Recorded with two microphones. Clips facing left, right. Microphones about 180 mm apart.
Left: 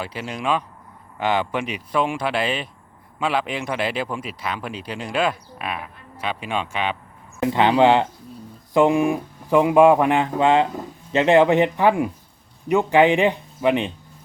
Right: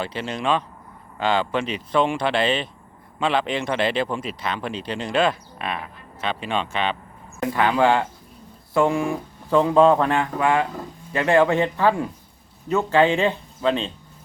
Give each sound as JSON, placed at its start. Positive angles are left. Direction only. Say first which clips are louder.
{"t": 0.0, "sound": "speech", "louder": "right 1 dB", "side_deg": 10}
{"t": 7.4, "sound": "speech", "louder": "left 3 dB", "side_deg": 20}